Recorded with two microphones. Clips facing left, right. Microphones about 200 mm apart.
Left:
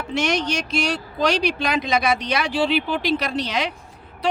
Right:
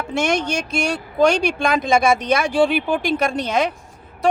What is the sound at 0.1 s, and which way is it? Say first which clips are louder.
Speech: right 2 dB; 50° right (ahead or behind).